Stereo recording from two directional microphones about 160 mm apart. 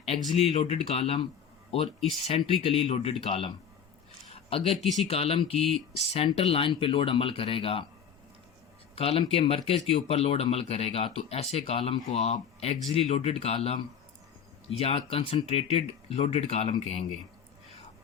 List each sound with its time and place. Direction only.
0.3 s speech: 40° left (ahead or behind)
9.0 s speech: 40° left (ahead or behind)